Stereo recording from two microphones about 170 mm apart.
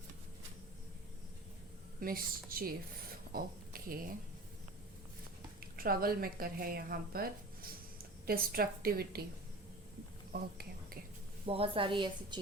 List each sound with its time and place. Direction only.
2.0 s speech: 60° right (ahead or behind)
5.7 s speech: 60° right (ahead or behind)
10.3 s speech: 60° right (ahead or behind)
11.4 s a woman's voice: 35° right (ahead or behind)